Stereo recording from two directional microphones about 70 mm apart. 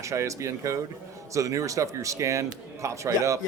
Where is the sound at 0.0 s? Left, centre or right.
Right.